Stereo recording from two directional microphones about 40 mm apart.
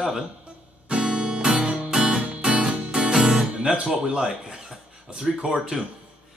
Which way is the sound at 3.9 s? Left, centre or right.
Centre.